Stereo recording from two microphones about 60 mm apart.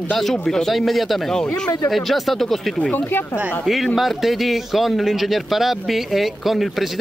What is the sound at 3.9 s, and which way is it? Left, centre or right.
Speech, centre.